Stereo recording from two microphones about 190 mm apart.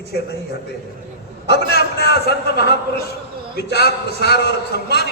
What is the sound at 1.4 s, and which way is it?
Speech, 60° left (ahead or behind).